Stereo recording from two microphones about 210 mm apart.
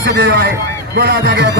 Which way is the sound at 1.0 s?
50° right (ahead or behind).